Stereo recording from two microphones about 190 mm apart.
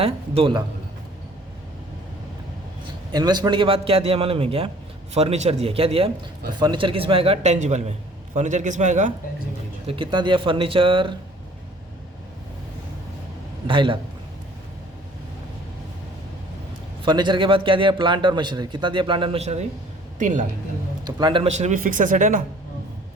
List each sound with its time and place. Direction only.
0.0 s a man's voice: 30° right (ahead or behind)
3.1 s a man's voice: 20° right (ahead or behind); by 9.1 s 40° right (ahead or behind)
9.8 s a man's voice: 25° right (ahead or behind)
13.7 s a man's voice: 25° right (ahead or behind)
17.1 s a man's voice: 25° right (ahead or behind); by 20.4 s 40° right (ahead or behind)
21.0 s a man's voice: 25° right (ahead or behind)
21.4 s speech: 35° right (ahead or behind)